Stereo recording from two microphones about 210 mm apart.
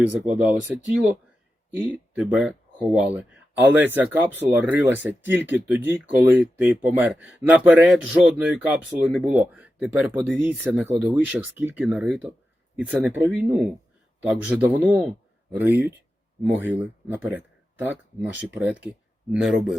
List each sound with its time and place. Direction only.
0.0 s speech: 5° right (ahead or behind)
1.8 s speech: 5° right (ahead or behind)